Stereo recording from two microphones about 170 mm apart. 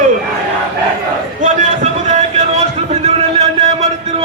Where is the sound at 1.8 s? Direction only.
40° right (ahead or behind).